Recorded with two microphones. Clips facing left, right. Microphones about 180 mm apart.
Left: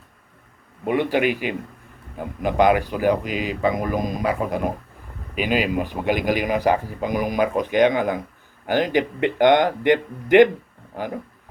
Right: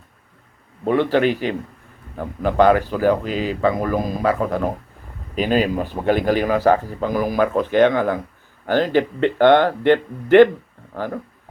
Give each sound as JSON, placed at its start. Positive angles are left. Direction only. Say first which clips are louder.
{"t": 0.9, "sound": "speech", "louder": "right 3 dB", "side_deg": 15}